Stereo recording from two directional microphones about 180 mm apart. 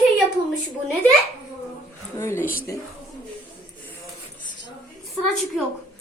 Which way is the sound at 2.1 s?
15° left (ahead or behind).